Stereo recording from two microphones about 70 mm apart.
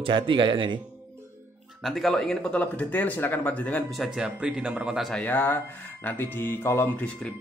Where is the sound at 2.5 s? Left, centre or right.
Left.